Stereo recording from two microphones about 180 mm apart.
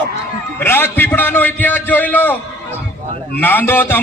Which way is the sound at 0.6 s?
10° left (ahead or behind).